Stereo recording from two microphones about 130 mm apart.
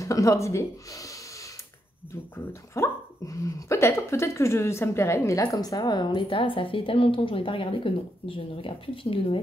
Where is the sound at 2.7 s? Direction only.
25° left (ahead or behind).